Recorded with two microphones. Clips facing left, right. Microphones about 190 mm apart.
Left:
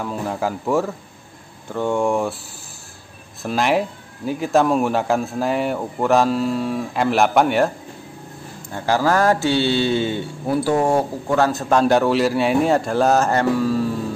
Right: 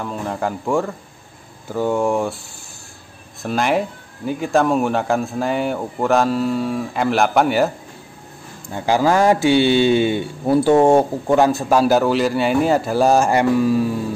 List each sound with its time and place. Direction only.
0.0 s speech: centre (ahead or behind)
3.4 s speech: centre (ahead or behind)
8.6 s speech: 15° right (ahead or behind)